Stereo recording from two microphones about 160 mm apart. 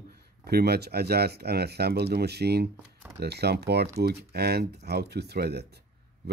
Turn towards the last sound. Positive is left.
turn(degrees=-90)